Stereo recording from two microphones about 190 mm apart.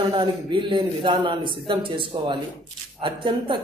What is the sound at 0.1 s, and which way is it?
Speech, 25° right (ahead or behind).